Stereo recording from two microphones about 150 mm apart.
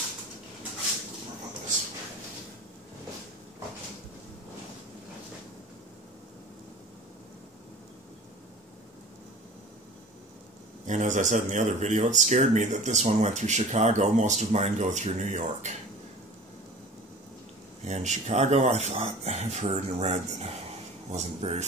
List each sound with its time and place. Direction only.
10.9 s a man's voice: 55° right (ahead or behind)
17.8 s a man's voice: 50° right (ahead or behind)